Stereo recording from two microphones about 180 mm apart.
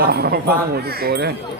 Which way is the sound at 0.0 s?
60° right (ahead or behind).